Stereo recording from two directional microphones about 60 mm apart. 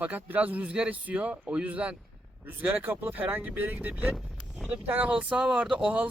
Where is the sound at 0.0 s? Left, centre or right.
Right; by 5.7 s centre.